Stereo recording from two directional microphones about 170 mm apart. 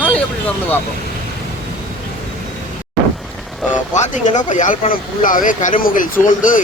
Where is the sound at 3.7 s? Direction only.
45° left (ahead or behind).